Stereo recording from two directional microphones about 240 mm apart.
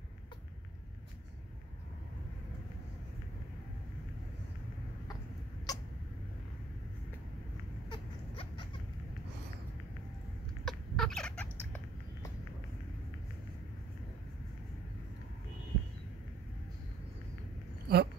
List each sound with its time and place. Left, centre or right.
5.7 s cat: centre
7.9 s a sound: left
10.6 s chicken: centre
17.9 s dog: right